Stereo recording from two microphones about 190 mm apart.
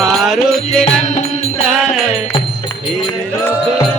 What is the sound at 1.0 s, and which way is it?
Music, 35° left (ahead or behind).